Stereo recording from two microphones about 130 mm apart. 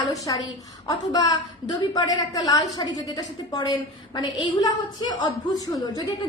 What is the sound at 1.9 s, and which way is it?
A woman's voice, 30° left (ahead or behind).